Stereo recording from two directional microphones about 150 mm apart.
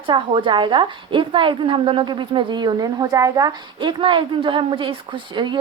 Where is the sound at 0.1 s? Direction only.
30° right (ahead or behind).